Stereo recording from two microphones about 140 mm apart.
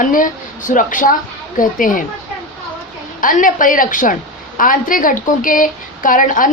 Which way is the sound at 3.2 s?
70° left (ahead or behind).